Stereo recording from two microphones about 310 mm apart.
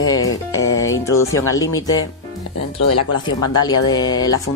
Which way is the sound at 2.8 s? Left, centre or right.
Left.